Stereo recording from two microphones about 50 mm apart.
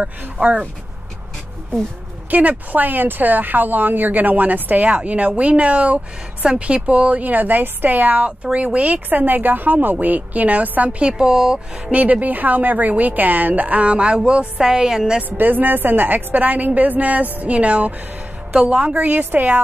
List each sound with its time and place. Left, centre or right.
0.0 s a woman's voice: right
2.3 s a woman's voice: right; by 11.9 s centre
11.9 s speech: right; by 15.1 s centre
15.2 s a woman's voice: right